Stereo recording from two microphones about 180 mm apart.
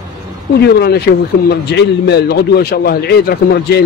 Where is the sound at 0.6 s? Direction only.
65° left (ahead or behind).